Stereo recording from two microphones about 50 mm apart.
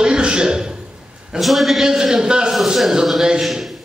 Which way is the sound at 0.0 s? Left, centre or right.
Centre.